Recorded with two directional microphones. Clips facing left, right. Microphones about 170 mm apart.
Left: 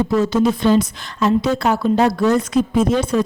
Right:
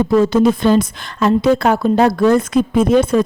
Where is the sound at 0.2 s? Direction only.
55° right (ahead or behind).